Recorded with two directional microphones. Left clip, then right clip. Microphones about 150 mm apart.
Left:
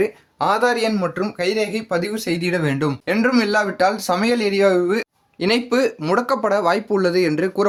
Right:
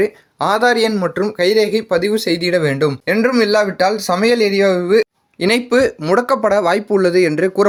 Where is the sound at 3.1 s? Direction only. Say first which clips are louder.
Right 4 dB; 20° right (ahead or behind).